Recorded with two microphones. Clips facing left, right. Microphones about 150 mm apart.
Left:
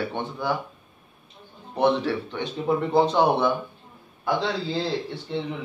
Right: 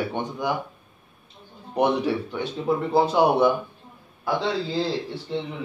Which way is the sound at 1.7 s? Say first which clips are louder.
Even; 15° right (ahead or behind).